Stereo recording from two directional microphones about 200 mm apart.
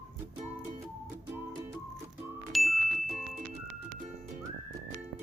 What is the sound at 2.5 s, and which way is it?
Ding, centre (ahead or behind).